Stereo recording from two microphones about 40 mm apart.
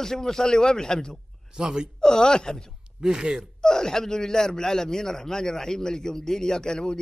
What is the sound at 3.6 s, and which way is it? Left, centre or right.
Speech, centre.